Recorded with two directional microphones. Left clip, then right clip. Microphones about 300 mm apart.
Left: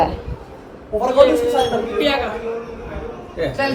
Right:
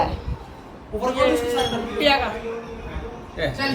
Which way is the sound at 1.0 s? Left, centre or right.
Centre.